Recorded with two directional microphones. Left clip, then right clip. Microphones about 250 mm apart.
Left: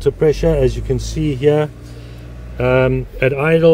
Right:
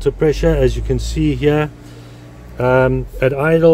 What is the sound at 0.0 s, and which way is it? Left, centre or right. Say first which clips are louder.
Speech: left 1 dB; centre.